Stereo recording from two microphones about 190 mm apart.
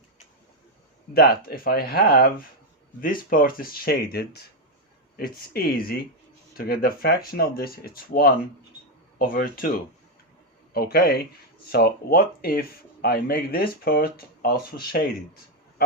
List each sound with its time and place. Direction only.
1.1 s speech: 50° left (ahead or behind)
10.8 s speech: 55° left (ahead or behind)